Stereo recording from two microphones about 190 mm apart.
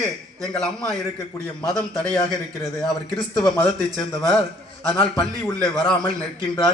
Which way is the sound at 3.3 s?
20° left (ahead or behind).